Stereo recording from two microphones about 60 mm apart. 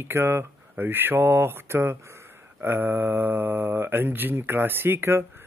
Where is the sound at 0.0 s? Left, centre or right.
Right.